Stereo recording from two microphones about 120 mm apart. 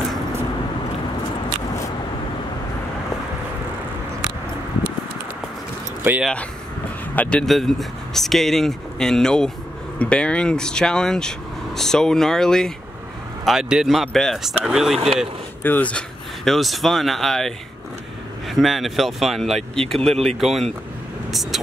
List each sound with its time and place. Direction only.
6.0 s speech: 20° right (ahead or behind)
7.2 s speech: 10° left (ahead or behind)
15.6 s speech: 15° left (ahead or behind)
16.4 s speech: centre (ahead or behind)